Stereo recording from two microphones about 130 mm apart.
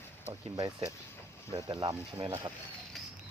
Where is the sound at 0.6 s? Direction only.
30° right (ahead or behind).